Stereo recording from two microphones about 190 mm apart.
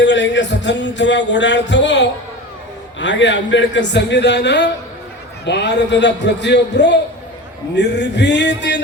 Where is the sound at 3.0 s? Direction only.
70° left (ahead or behind).